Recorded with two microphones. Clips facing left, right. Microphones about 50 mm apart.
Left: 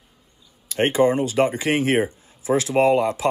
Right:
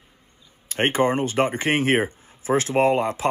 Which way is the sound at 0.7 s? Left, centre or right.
Right.